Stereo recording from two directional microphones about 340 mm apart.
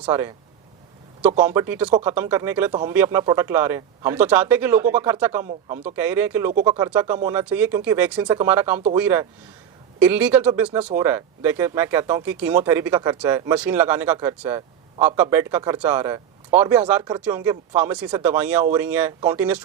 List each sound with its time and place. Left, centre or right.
0.0 s speech: centre
1.4 s speech: centre
5.5 s speech: right
5.8 s speech: centre